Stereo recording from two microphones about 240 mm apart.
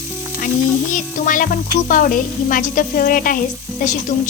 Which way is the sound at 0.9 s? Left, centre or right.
Left.